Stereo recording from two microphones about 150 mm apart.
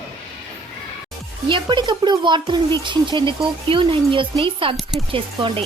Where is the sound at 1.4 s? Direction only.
30° right (ahead or behind).